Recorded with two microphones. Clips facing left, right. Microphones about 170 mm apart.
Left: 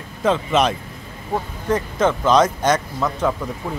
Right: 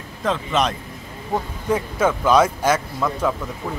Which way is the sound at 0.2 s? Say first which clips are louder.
Left 3 dB; centre (ahead or behind).